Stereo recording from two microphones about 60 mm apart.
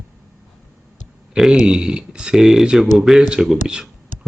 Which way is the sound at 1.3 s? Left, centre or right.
Centre.